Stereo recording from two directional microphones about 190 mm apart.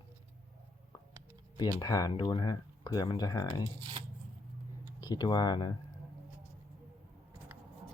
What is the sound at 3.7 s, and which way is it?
Speech, 25° right (ahead or behind).